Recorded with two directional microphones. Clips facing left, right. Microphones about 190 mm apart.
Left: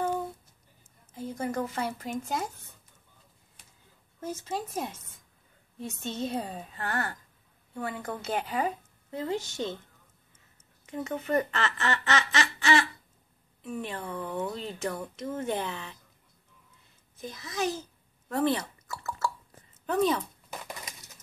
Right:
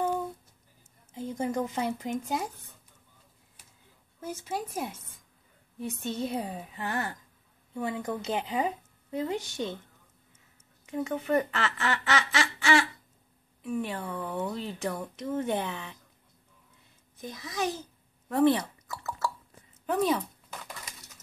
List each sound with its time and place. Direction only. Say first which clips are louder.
1.1 s speech: right 1 dB; 20° right (ahead or behind)
4.2 s speech: even; 10° right (ahead or behind)
11.1 s speech: even; 10° right (ahead or behind)
17.2 s speech: even; 15° right (ahead or behind)